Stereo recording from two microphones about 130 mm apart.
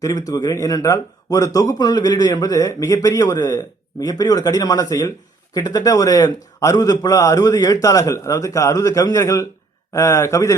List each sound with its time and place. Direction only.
0.0 s a man's voice: 25° left (ahead or behind)